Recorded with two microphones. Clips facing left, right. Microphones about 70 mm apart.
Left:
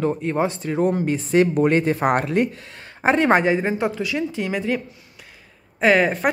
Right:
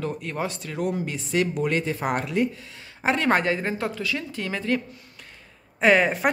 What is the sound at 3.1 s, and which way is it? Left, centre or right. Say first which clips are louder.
A woman's voice: left 5 dB; left.